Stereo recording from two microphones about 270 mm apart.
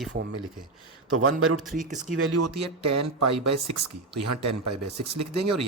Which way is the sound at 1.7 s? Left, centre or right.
Right.